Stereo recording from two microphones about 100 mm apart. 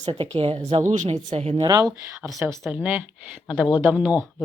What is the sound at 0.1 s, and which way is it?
Speech, 75° right (ahead or behind).